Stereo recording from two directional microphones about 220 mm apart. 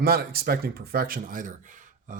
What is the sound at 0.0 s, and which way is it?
Speech, 45° right (ahead or behind).